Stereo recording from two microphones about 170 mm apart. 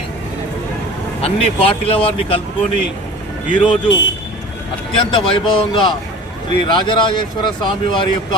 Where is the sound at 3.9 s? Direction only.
90° left.